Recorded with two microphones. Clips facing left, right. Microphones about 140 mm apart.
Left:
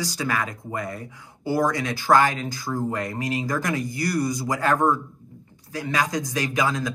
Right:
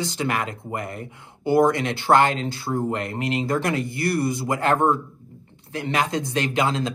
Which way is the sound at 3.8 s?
60° right (ahead or behind).